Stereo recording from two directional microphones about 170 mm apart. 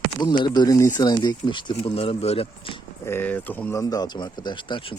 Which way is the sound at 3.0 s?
10° left (ahead or behind).